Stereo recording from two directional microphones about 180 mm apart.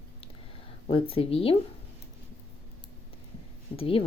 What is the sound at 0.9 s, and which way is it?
Speech, 30° left (ahead or behind).